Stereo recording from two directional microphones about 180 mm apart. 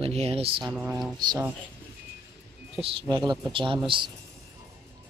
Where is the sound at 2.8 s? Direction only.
30° right (ahead or behind).